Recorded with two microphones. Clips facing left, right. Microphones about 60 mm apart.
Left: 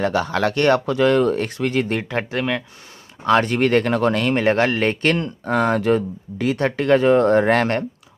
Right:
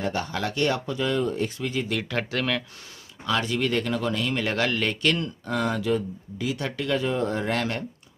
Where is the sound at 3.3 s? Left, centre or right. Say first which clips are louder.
Left 9 dB; left.